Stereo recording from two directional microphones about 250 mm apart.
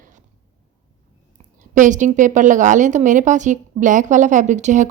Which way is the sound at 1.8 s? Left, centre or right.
Right.